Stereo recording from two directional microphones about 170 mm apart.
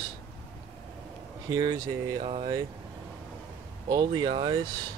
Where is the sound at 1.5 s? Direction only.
25° right (ahead or behind).